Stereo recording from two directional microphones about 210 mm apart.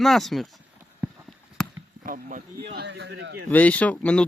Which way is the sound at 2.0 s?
40° right (ahead or behind).